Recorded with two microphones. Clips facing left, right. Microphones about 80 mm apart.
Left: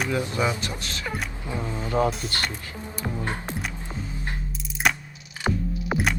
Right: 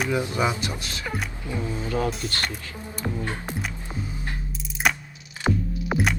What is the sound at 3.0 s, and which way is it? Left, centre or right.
Music, left.